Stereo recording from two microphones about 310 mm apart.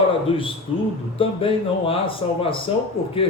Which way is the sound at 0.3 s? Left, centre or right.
Centre.